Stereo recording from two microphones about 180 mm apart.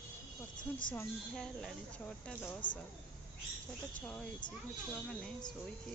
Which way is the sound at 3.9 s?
10° left (ahead or behind).